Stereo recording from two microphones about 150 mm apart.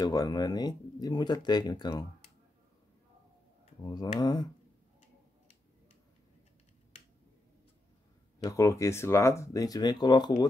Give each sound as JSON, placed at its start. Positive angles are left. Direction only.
{"t": 0.0, "sound": "speech", "side_deg": 25}
{"t": 3.8, "sound": "speech", "side_deg": 30}
{"t": 8.5, "sound": "speech", "side_deg": 20}